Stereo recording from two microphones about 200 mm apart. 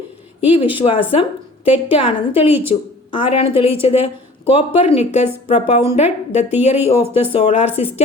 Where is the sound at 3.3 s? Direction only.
30° left (ahead or behind).